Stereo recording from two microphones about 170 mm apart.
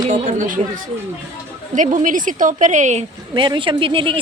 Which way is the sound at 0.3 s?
50° right (ahead or behind).